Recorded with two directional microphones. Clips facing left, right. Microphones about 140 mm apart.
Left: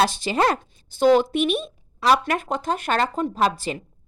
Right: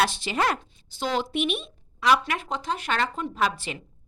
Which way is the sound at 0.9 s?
50° left (ahead or behind).